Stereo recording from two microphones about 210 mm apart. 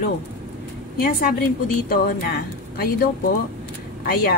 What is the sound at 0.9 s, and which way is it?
A woman's voice, 45° left (ahead or behind).